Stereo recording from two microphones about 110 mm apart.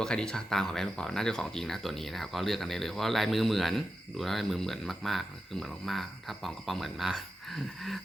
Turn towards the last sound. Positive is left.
turn(degrees=0)  # may be behind; listen again after turning